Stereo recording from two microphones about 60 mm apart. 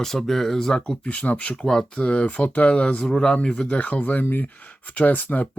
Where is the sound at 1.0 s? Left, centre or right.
Left.